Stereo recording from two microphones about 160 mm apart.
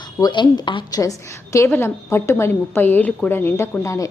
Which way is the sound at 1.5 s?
15° left (ahead or behind).